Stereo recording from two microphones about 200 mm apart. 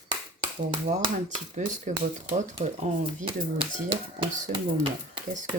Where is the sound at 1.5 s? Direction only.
35° right (ahead or behind).